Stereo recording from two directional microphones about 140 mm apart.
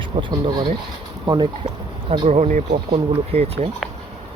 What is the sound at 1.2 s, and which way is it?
Speech, 30° right (ahead or behind).